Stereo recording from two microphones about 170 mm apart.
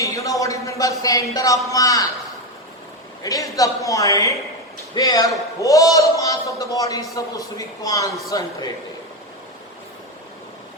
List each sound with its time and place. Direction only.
0.0 s speech: 20° left (ahead or behind)
3.2 s a man's voice: 20° left (ahead or behind)